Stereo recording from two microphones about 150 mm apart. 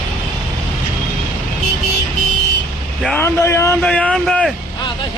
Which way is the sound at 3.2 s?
20° left (ahead or behind).